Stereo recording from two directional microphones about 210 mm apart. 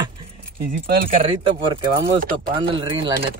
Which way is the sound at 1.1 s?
25° right (ahead or behind).